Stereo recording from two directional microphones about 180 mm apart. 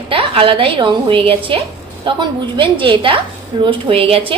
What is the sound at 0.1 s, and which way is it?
A woman's voice, 30° right (ahead or behind).